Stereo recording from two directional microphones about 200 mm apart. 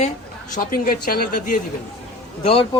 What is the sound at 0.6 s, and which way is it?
Speech, 45° left (ahead or behind).